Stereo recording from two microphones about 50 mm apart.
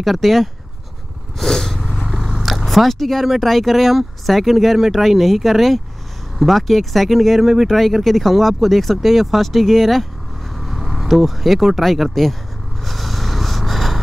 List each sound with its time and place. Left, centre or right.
0.0 s speech: centre
1.4 s vehicle: centre
1.9 s vehicle: centre
2.5 s speech: centre
12.8 s vehicle: centre